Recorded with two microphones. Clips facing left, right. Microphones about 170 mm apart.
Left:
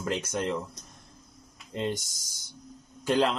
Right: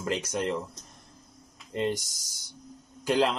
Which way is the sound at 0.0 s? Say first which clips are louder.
Even; 15° right (ahead or behind).